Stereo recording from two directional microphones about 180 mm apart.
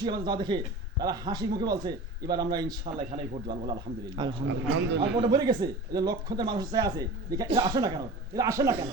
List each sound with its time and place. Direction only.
0.0 s speech: 25° right (ahead or behind)
2.8 s a man's voice: 35° right (ahead or behind)
3.5 s speech: 25° right (ahead or behind)
4.4 s a man's voice: 75° right (ahead or behind)
5.1 s speech: 25° right (ahead or behind)